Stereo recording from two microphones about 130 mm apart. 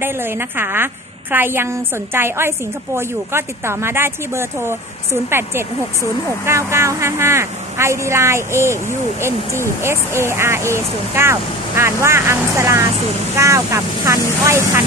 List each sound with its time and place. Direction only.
0.0 s a woman's voice: 15° right (ahead or behind)